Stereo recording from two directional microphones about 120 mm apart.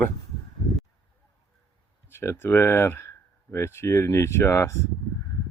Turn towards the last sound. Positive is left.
turn(degrees=25)  # may be behind; listen again after turning